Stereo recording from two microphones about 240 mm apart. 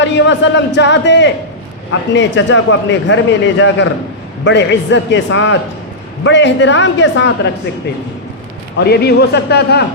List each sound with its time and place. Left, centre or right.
0.0 s speech: left
8.8 s speech: left